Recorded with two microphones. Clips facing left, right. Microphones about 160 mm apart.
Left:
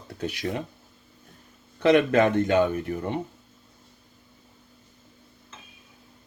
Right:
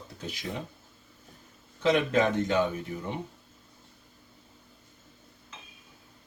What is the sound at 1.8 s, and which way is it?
Speech, 60° left (ahead or behind).